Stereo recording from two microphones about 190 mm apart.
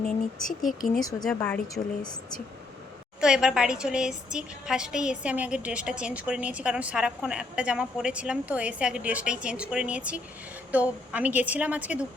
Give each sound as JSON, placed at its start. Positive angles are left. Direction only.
{"t": 0.7, "sound": "speech", "side_deg": 45}
{"t": 1.2, "sound": "a woman's voice", "side_deg": 5}
{"t": 1.6, "sound": "a woman's voice", "side_deg": 20}
{"t": 3.2, "sound": "a woman's voice", "side_deg": -5}